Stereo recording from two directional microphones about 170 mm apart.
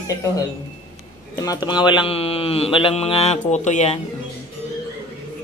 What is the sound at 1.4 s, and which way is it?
Speech, 25° left (ahead or behind).